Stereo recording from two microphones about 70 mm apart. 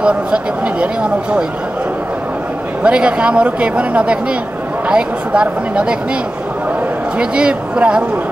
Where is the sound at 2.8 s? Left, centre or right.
Centre.